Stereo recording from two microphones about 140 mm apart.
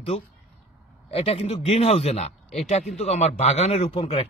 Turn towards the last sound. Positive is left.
turn(degrees=45)  # may be behind; listen again after turning